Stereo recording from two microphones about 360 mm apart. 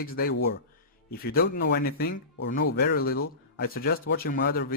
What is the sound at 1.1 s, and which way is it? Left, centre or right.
Speech, left.